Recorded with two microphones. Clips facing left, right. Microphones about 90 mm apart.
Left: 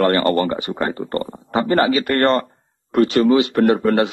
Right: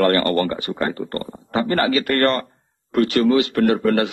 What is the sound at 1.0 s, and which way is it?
A man's voice, 25° left (ahead or behind).